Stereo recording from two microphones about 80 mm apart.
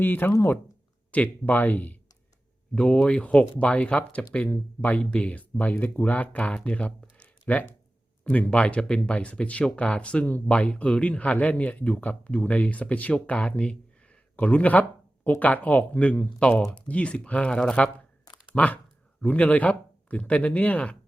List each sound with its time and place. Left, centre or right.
0.0 s speech: left